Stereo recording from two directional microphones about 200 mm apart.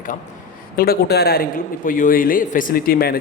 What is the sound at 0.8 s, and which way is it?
A man's voice, 50° left (ahead or behind).